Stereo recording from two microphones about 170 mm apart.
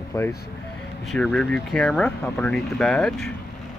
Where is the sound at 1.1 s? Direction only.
Centre (ahead or behind).